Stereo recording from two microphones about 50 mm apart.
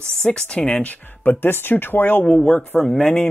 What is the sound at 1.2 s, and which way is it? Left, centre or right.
Speech, left.